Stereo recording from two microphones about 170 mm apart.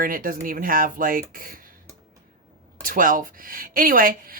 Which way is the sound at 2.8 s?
55° right (ahead or behind).